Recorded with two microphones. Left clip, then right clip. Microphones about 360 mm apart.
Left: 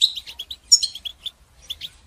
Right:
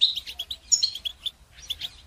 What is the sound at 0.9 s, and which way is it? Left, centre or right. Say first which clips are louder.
Bird: even; centre.